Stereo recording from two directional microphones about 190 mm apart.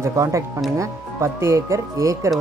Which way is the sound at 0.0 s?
15° right (ahead or behind).